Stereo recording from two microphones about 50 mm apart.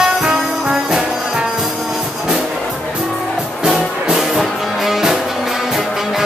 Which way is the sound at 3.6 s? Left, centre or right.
Centre.